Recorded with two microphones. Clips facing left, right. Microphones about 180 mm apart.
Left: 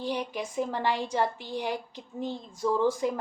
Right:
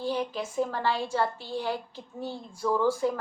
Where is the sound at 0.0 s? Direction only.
15° left (ahead or behind).